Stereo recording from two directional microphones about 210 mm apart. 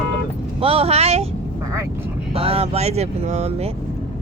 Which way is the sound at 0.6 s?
25° right (ahead or behind).